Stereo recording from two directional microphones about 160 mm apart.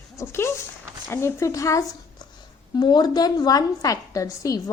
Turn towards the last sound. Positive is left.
turn(degrees=20)  # may be behind; listen again after turning